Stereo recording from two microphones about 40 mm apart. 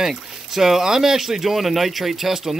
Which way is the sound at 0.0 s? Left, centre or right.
Centre.